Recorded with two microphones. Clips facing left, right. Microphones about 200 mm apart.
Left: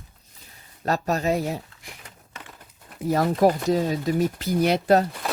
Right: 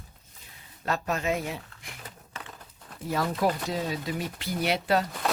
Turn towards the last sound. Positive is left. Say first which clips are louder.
# left 7 dB
turn(degrees=45)  # may be behind; listen again after turning